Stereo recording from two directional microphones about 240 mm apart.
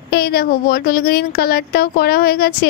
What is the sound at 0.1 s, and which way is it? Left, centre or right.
Speech, left.